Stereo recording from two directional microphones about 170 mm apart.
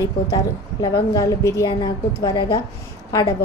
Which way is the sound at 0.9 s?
20° left (ahead or behind).